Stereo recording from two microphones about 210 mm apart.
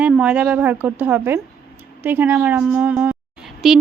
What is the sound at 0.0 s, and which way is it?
A woman's voice, 5° right (ahead or behind).